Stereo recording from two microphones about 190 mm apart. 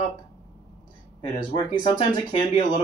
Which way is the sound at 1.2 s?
25° left (ahead or behind).